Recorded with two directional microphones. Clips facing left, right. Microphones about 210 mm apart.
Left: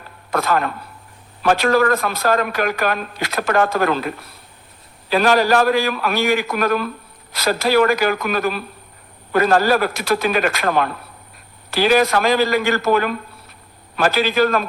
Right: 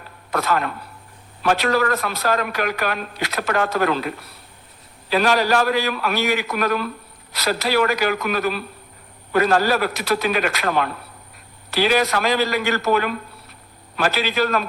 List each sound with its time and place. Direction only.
0.3 s a man's voice: 50° left (ahead or behind)
5.0 s speech: 45° left (ahead or behind)